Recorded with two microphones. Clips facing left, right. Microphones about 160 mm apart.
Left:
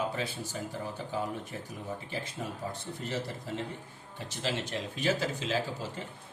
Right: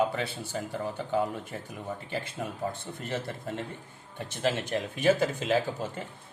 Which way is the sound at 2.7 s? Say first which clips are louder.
Right 2 dB; 55° right (ahead or behind).